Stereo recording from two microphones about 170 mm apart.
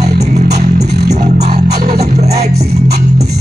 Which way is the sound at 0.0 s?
45° right (ahead or behind).